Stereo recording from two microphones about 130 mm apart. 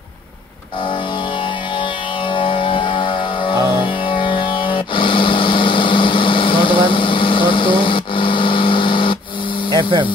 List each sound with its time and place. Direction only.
1.8 s music: 40° left (ahead or behind)
9.7 s speech: 35° right (ahead or behind)